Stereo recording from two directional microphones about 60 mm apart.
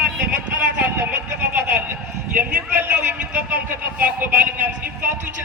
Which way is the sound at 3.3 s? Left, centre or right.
Right.